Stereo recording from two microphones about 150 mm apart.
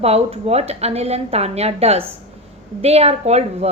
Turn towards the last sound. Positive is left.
turn(degrees=-45)  # may be behind; listen again after turning